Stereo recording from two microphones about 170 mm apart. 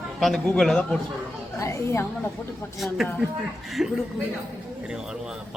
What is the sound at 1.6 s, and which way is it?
Speech, 15° left (ahead or behind).